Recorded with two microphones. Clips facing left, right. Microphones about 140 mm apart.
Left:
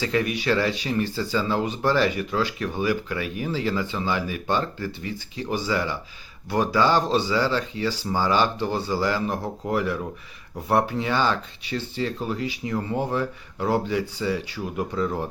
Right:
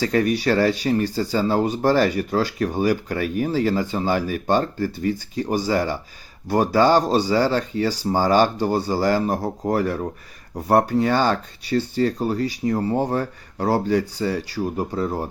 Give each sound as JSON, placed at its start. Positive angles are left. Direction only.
{"t": 0.0, "sound": "speech", "side_deg": -40}